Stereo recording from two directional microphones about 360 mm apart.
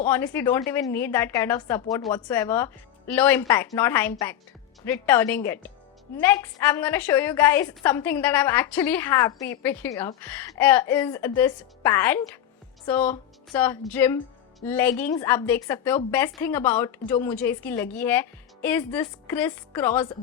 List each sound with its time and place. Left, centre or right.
0.0 s a woman's voice: centre